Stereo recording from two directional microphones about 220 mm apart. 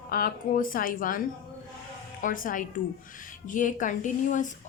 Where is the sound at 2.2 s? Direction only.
40° left (ahead or behind).